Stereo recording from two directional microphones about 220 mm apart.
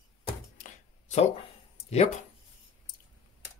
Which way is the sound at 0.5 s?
35° left (ahead or behind).